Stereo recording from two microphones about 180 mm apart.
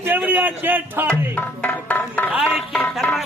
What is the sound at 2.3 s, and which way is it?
Speech, 5° right (ahead or behind).